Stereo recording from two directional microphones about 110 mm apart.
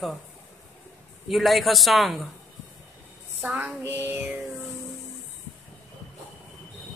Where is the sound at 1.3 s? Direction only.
Centre (ahead or behind).